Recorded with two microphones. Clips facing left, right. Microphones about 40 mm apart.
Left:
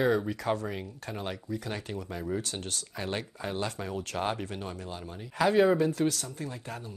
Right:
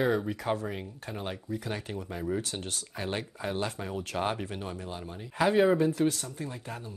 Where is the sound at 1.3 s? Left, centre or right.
Right.